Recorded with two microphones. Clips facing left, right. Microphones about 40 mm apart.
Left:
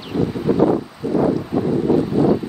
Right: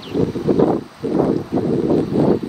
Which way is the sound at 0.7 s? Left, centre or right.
Centre.